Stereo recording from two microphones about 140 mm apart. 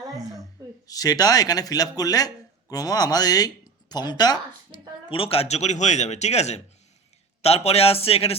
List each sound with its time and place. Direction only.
0.9 s speech: 25° left (ahead or behind); by 8.4 s 45° left (ahead or behind)